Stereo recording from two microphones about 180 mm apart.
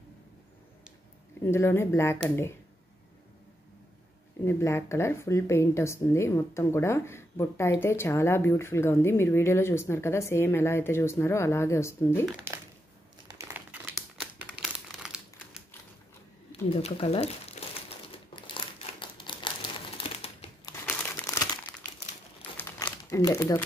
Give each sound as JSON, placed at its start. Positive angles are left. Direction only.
{"t": 1.4, "sound": "speech", "side_deg": 15}
{"t": 4.5, "sound": "speech", "side_deg": 15}
{"t": 13.3, "sound": "crumpling", "side_deg": -15}
{"t": 16.7, "sound": "crumpling", "side_deg": 35}
{"t": 20.6, "sound": "crumpling", "side_deg": 15}
{"t": 22.6, "sound": "crumpling", "side_deg": 10}
{"t": 23.2, "sound": "speech", "side_deg": 20}